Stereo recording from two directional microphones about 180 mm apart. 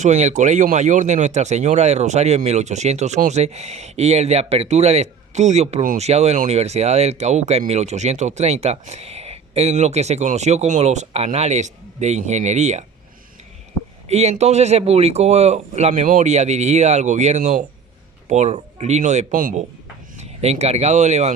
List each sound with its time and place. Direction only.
0.0 s speech: 40° right (ahead or behind)
14.1 s speech: 35° right (ahead or behind)
20.1 s speech: 35° right (ahead or behind)